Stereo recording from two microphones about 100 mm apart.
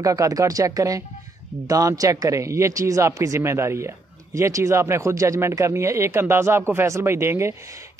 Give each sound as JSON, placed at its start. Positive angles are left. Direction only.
{"t": 0.0, "sound": "speech", "side_deg": -35}